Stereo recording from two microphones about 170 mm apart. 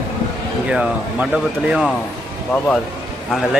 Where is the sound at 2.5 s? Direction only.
5° left (ahead or behind).